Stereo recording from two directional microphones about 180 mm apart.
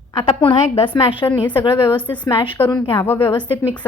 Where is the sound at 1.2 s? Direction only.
10° left (ahead or behind).